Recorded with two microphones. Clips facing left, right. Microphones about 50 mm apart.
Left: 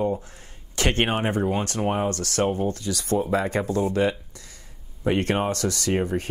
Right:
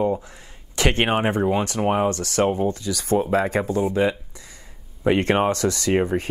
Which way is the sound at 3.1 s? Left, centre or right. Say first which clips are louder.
Right 3 dB; right.